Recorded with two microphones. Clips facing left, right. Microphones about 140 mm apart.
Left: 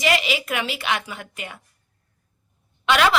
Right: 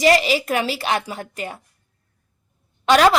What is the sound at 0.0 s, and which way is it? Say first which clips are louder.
A woman's voice: right 6 dB; 40° right (ahead or behind).